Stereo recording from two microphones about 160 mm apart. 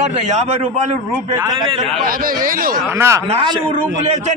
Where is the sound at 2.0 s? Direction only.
60° right (ahead or behind).